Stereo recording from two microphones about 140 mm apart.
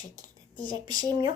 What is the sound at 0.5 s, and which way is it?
Speech, 30° right (ahead or behind).